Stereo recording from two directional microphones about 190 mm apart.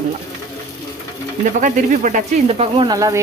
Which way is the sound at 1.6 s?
40° right (ahead or behind).